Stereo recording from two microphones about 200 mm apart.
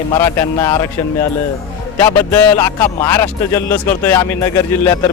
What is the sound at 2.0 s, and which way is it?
Speech, 10° left (ahead or behind).